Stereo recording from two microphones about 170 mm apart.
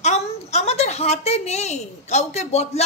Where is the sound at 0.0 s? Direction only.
40° left (ahead or behind).